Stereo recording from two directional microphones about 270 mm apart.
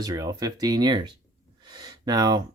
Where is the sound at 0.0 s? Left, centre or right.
Centre.